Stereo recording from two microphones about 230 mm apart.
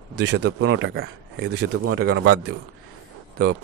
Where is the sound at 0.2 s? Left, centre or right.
Right.